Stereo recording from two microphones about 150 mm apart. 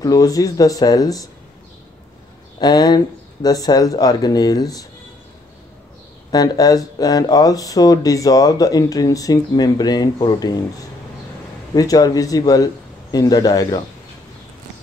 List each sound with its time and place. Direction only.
0.0 s speech: 25° left (ahead or behind)
2.6 s speech: 25° left (ahead or behind)
6.3 s speech: 25° left (ahead or behind)